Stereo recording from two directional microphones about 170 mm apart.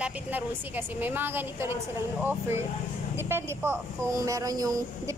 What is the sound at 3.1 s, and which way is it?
Speech, 15° right (ahead or behind).